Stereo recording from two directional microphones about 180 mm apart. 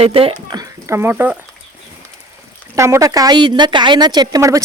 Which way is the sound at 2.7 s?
15° right (ahead or behind).